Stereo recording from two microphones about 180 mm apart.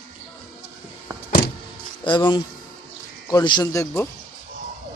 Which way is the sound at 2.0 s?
25° left (ahead or behind).